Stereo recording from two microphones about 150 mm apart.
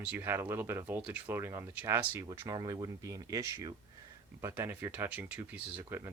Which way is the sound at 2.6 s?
25° right (ahead or behind).